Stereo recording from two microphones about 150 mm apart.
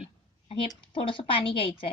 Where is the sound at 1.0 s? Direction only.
35° left (ahead or behind).